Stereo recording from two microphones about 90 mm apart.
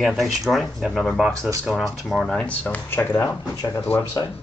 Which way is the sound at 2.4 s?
15° left (ahead or behind).